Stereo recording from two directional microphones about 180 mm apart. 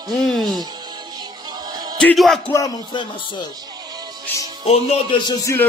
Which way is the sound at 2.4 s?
20° left (ahead or behind).